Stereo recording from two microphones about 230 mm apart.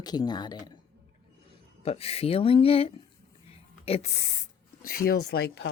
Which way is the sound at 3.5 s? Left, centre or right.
Left.